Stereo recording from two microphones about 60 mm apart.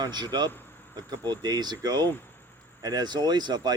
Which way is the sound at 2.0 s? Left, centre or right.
Left.